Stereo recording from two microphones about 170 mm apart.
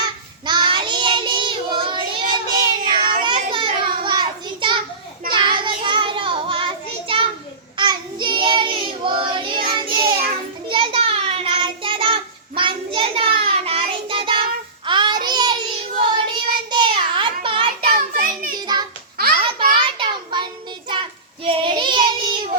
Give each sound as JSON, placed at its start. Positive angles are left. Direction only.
{"t": 0.0, "sound": "child singing", "side_deg": -25}
{"t": 7.1, "sound": "a sound", "side_deg": -30}
{"t": 7.8, "sound": "child singing", "side_deg": -25}
{"t": 17.9, "sound": "child singing", "side_deg": -55}
{"t": 18.6, "sound": "child singing", "side_deg": -25}